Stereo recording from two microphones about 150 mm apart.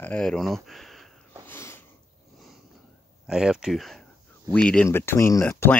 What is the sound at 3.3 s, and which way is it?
Speech, 5° right (ahead or behind).